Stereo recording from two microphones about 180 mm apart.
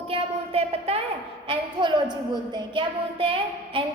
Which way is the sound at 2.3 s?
25° right (ahead or behind).